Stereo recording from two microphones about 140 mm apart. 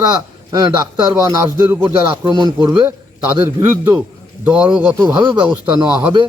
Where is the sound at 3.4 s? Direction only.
20° right (ahead or behind).